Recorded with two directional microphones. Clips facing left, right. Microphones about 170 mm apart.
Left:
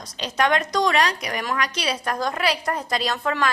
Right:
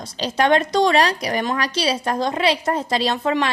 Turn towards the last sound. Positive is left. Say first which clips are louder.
# right 4 dB
turn(degrees=-25)  # may be behind; listen again after turning